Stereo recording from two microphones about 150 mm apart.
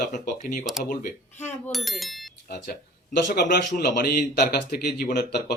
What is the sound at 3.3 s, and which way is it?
Speech, 75° left (ahead or behind).